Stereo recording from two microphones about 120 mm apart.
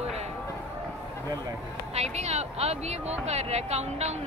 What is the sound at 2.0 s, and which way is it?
Speech, 65° right (ahead or behind).